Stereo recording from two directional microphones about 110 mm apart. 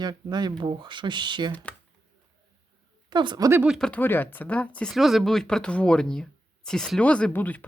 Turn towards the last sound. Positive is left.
turn(degrees=15)  # may be behind; listen again after turning